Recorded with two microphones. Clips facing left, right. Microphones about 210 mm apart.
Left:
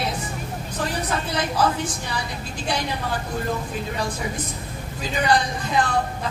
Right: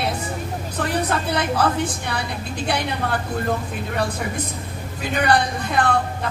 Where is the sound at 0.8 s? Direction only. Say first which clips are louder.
Right 3 dB; 60° right (ahead or behind).